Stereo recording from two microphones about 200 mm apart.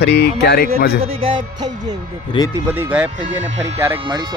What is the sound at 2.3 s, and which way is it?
Speech, 25° left (ahead or behind).